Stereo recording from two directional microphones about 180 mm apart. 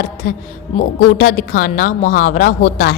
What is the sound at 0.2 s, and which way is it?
A woman's voice, 45° left (ahead or behind).